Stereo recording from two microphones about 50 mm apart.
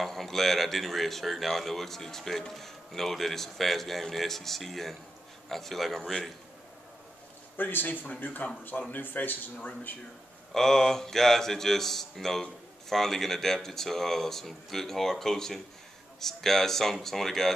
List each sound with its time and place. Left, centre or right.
0.0 s speech: centre
7.5 s speech: left
10.5 s speech: centre